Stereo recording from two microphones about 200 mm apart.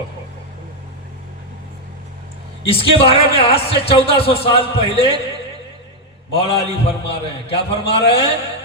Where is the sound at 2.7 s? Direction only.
30° left (ahead or behind).